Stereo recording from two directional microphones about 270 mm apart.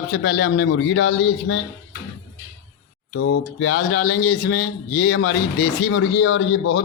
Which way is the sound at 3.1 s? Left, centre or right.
Left.